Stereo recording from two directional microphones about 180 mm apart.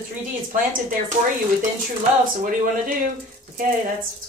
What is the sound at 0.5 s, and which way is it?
Speech, 45° right (ahead or behind).